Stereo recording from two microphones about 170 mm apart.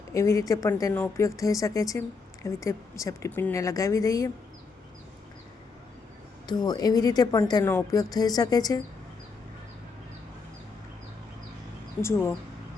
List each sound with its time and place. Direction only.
0.1 s speech: 20° left (ahead or behind)
6.5 s speech: 25° left (ahead or behind)